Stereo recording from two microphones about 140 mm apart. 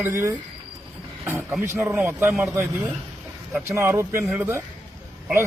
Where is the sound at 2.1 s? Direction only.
15° right (ahead or behind).